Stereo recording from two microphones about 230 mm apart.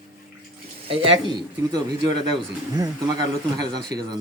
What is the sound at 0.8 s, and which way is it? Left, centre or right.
A man's voice, right.